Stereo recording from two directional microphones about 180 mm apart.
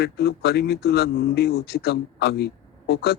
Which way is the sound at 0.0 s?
65° left (ahead or behind).